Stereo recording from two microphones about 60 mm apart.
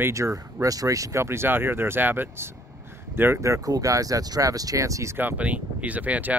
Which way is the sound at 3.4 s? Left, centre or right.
Right.